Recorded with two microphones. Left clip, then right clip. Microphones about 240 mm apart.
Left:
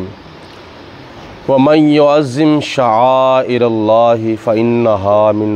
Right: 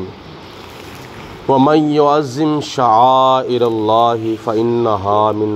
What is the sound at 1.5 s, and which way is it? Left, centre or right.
Speech, left.